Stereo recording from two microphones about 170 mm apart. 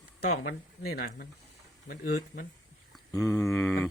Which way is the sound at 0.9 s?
60° left (ahead or behind).